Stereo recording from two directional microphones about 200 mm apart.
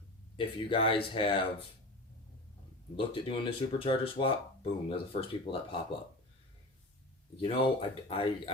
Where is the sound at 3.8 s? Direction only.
25° left (ahead or behind).